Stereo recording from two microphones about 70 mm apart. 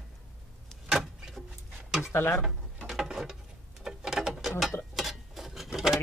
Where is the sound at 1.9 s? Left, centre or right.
Centre.